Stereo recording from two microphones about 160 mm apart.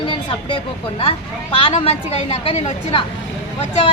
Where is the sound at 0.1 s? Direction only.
35° left (ahead or behind).